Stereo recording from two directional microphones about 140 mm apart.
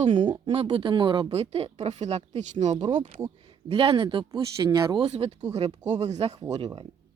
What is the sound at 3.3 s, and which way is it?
Speech, 40° right (ahead or behind).